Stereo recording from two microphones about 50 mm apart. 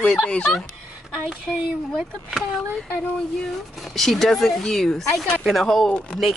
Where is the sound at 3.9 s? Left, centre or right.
Centre.